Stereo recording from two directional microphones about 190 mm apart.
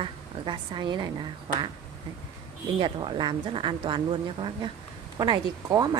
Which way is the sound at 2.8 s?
25° right (ahead or behind).